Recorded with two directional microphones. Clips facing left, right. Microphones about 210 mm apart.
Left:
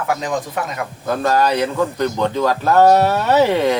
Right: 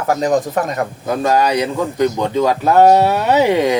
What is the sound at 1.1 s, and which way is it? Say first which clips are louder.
Speech: right 1 dB; 15° right (ahead or behind).